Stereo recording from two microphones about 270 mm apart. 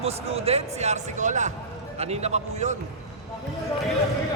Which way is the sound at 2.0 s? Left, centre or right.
Right.